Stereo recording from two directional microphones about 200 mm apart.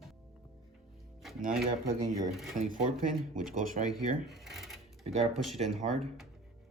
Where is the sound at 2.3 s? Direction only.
Centre (ahead or behind).